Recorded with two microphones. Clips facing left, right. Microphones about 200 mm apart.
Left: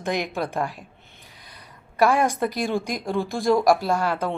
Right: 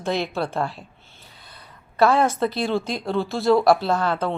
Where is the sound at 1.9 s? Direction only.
15° left (ahead or behind).